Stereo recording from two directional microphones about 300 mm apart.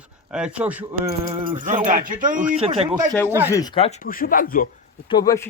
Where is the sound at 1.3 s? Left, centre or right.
Centre.